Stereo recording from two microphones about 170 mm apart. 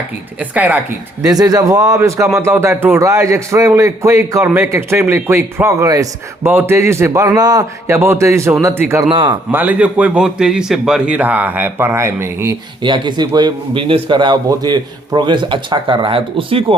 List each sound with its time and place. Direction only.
0.3 s speech: 10° right (ahead or behind)
1.2 s speech: 20° right (ahead or behind)
9.0 s a man's voice: 30° right (ahead or behind)
9.5 s speech: 10° right (ahead or behind)
12.8 s a man's voice: 25° right (ahead or behind)